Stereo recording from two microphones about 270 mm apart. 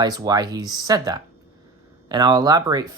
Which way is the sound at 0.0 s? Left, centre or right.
Centre.